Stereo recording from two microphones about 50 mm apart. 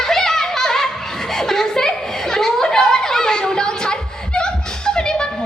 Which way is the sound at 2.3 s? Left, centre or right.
Centre.